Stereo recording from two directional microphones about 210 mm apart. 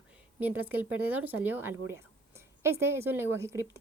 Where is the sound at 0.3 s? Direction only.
10° right (ahead or behind).